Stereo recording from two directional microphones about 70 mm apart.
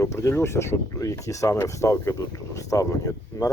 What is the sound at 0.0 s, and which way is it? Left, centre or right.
Speech, left.